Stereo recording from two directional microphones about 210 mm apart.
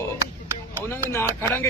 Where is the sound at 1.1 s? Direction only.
10° left (ahead or behind).